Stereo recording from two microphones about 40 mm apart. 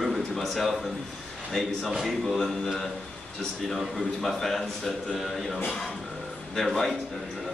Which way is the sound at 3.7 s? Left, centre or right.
Centre.